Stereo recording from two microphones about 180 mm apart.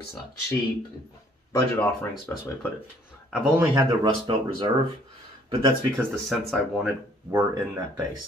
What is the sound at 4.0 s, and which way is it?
Speech, 25° right (ahead or behind).